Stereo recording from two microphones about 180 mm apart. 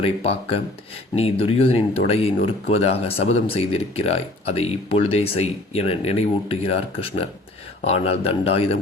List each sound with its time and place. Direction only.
0.0 s speech: 35° left (ahead or behind)